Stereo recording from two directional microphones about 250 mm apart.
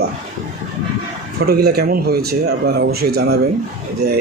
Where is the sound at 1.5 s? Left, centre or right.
Right.